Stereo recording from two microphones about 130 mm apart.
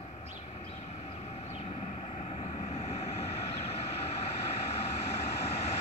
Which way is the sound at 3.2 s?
55° left (ahead or behind).